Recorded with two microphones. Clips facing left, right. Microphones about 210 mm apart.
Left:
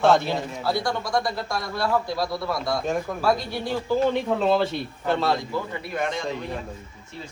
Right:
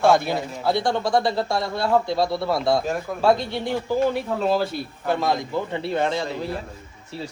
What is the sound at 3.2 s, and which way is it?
Speech, 25° right (ahead or behind).